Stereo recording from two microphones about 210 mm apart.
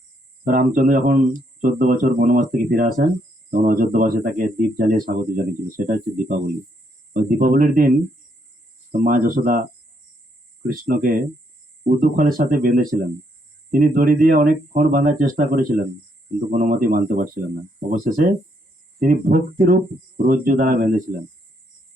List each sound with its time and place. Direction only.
0.4 s speech: 40° right (ahead or behind)
10.7 s speech: 40° right (ahead or behind)